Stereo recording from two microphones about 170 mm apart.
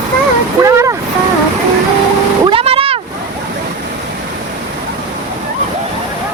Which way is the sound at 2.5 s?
35° right (ahead or behind).